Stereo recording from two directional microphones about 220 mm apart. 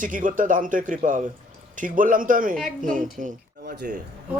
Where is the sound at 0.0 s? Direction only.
35° right (ahead or behind).